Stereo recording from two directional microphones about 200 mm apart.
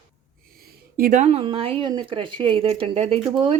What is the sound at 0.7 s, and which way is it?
A woman's voice, 45° right (ahead or behind).